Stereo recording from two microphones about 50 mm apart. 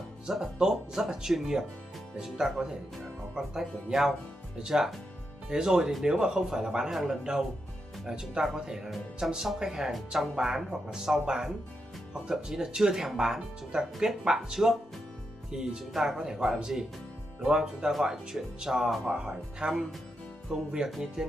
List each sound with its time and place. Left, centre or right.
0.3 s speech: centre
9.9 s speech: centre
10.3 s speech: centre